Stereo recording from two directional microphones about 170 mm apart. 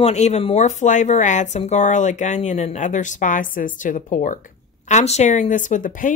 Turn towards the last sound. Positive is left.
turn(degrees=50)  # may be behind; listen again after turning